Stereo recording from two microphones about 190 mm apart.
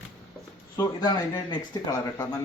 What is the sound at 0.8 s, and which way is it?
A man's voice, 20° left (ahead or behind).